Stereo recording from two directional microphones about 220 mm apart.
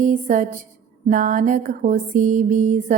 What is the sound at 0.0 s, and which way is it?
Music, 35° right (ahead or behind).